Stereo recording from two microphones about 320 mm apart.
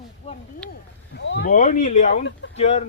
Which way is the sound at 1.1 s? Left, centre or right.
Left.